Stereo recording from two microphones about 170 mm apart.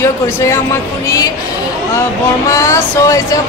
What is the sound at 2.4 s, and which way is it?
Speech, 20° left (ahead or behind).